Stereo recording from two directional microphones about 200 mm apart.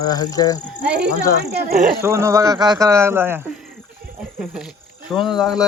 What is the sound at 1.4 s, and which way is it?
Speech, 50° right (ahead or behind).